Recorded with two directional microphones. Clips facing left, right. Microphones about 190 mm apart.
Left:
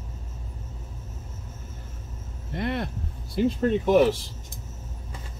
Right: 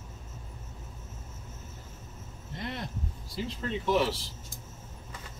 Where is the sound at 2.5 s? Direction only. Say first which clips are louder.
Left 9 dB; 60° left (ahead or behind).